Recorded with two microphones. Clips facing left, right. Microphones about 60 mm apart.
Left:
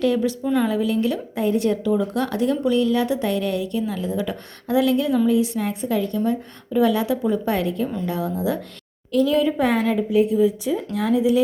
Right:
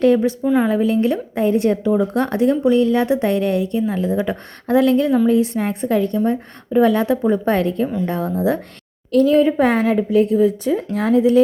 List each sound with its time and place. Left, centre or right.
0.0 s speech: right
0.4 s speech: centre
0.7 s a woman's voice: right